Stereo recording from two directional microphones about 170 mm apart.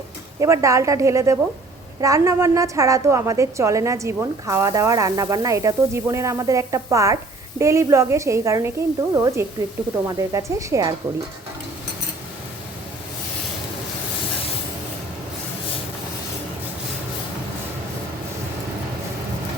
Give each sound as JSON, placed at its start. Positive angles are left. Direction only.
{"t": 0.3, "sound": "a woman's voice", "side_deg": -20}